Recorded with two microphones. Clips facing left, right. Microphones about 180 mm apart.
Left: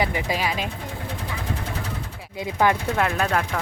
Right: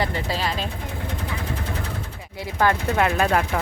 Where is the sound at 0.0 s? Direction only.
10° left (ahead or behind).